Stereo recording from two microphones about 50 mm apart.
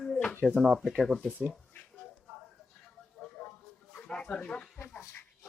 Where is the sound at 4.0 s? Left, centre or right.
Centre.